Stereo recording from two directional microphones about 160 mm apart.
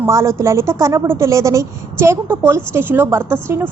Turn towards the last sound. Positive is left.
turn(degrees=-15)  # may be behind; listen again after turning